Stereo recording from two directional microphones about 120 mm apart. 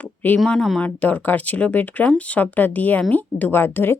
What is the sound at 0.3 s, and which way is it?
Speech, 5° left (ahead or behind).